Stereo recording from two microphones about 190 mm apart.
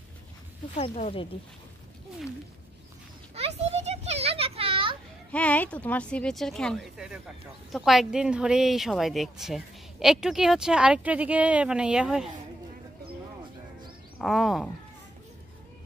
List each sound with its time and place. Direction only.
0.7 s speech: 35° left (ahead or behind)
3.3 s children playing: 35° right (ahead or behind)
5.3 s speech: 5° left (ahead or behind)
14.1 s speech: centre (ahead or behind)